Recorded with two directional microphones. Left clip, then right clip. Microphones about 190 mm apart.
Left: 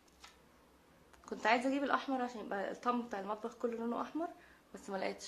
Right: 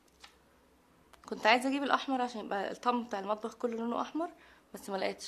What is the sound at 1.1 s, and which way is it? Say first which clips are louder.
Speech: right 5 dB; 40° right (ahead or behind).